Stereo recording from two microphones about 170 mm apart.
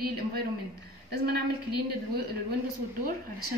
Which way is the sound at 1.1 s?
65° right (ahead or behind).